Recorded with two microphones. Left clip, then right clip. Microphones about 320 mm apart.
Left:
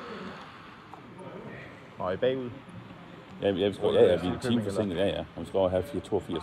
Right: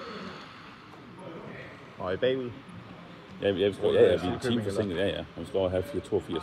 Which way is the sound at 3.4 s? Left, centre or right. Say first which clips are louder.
Right 1 dB; left.